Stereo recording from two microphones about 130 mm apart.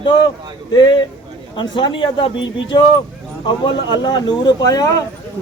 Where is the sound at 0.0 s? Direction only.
40° left (ahead or behind).